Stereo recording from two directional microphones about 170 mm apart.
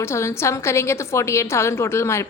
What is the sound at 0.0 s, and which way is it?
A woman's voice, 15° left (ahead or behind).